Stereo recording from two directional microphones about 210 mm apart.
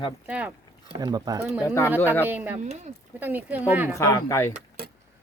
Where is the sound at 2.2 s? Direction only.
10° right (ahead or behind).